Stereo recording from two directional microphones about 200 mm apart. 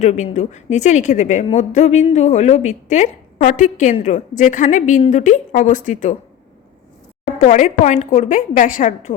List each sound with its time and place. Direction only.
0.0 s a woman's voice: 35° left (ahead or behind)
7.3 s a woman's voice: 40° left (ahead or behind)